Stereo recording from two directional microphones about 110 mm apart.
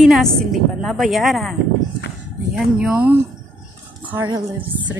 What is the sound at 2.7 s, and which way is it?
Speech, 10° right (ahead or behind).